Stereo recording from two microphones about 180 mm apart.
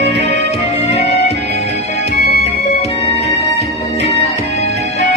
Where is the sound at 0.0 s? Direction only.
35° left (ahead or behind).